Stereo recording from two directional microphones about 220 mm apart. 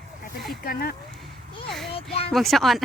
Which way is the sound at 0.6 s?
45° left (ahead or behind).